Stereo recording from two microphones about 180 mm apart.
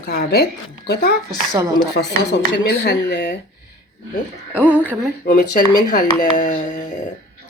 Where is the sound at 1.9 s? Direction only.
70° left (ahead or behind).